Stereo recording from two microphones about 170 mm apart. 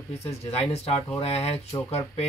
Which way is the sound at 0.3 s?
40° left (ahead or behind).